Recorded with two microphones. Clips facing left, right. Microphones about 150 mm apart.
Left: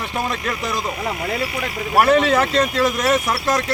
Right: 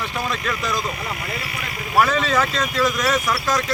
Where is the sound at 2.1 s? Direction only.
65° left (ahead or behind).